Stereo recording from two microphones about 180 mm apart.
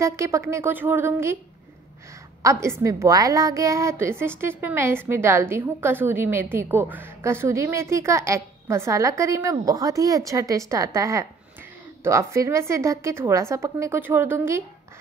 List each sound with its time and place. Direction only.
0.0 s a woman's voice: 15° right (ahead or behind)
2.4 s a woman's voice: 15° right (ahead or behind)